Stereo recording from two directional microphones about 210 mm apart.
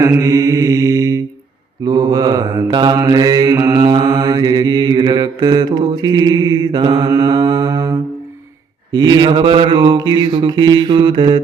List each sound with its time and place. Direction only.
0.0 s mantra: 15° right (ahead or behind)